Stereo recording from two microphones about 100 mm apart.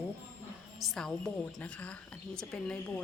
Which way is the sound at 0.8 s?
5° left (ahead or behind).